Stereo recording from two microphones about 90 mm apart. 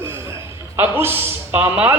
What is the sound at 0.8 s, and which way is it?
A man's voice, 25° right (ahead or behind).